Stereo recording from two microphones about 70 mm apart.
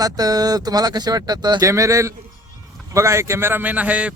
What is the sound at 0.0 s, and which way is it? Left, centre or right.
Speech, right.